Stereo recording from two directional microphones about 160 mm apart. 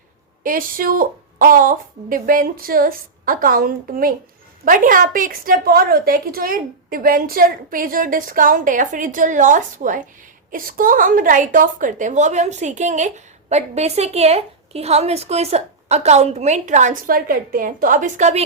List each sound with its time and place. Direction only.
0.4 s a woman's voice: 60° right (ahead or behind); by 18.4 s 45° right (ahead or behind)